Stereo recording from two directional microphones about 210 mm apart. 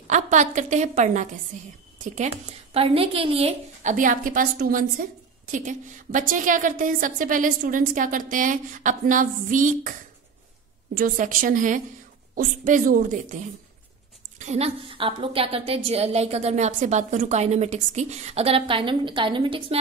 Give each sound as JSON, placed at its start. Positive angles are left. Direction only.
{"t": 0.1, "sound": "a woman's voice", "side_deg": -35}
{"t": 2.7, "sound": "a woman's voice", "side_deg": -25}
{"t": 11.0, "sound": "a woman's voice", "side_deg": -40}
{"t": 14.4, "sound": "a woman's voice", "side_deg": -30}